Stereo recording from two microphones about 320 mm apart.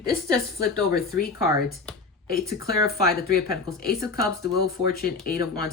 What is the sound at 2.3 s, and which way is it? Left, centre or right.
Speech, left.